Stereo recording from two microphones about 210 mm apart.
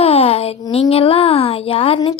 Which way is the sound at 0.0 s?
30° left (ahead or behind).